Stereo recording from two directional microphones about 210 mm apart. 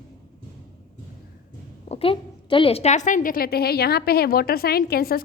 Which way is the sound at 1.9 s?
25° left (ahead or behind).